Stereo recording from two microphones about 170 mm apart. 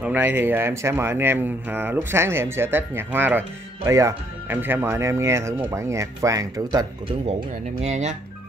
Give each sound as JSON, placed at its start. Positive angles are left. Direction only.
{"t": 0.0, "sound": "speech", "side_deg": -10}
{"t": 7.8, "sound": "speech", "side_deg": -40}